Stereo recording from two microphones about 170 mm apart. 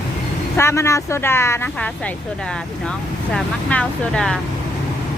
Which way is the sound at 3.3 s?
5° left (ahead or behind).